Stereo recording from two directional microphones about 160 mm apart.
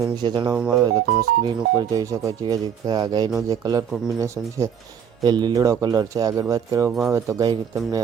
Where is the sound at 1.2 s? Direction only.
25° right (ahead or behind).